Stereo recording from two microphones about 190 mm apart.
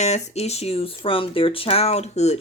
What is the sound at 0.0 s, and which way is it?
Speech, 35° left (ahead or behind).